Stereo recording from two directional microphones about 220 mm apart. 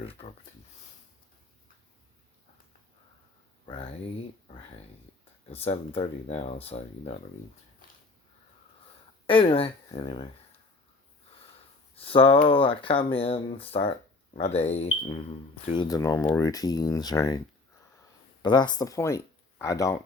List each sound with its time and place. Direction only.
0.0 s speech: 25° left (ahead or behind)
3.7 s speech: 25° left (ahead or behind)
5.5 s speech: 30° left (ahead or behind)
7.8 s a sound: 40° left (ahead or behind)
9.2 s speech: 25° left (ahead or behind)
11.9 s speech: 25° left (ahead or behind)
18.4 s speech: 20° left (ahead or behind)